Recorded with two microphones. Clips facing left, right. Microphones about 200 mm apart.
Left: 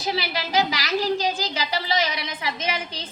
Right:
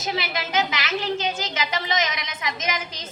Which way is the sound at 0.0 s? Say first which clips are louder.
Left 1 dB; 35° left (ahead or behind).